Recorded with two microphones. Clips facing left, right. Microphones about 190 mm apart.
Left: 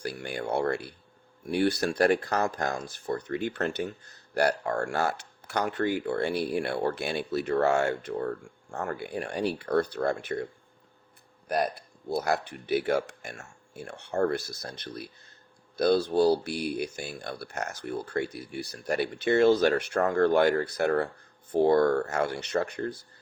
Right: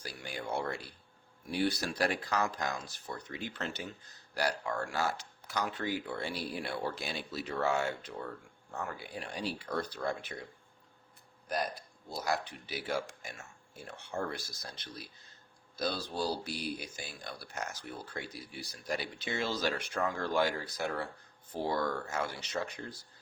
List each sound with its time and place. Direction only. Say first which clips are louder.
0.0 s speech: left 8 dB; 65° left (ahead or behind)